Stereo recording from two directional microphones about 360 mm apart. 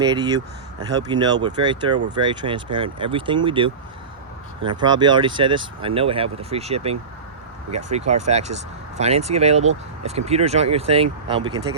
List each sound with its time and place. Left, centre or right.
0.0 s speech: centre
4.8 s speech: centre